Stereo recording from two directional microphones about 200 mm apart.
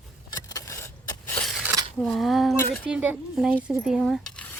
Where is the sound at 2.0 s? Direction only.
Centre (ahead or behind).